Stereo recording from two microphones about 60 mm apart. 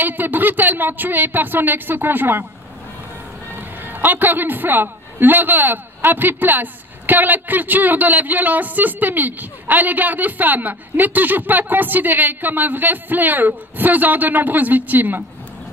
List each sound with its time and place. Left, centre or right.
0.0 s a man's voice: right
3.5 s a man's voice: right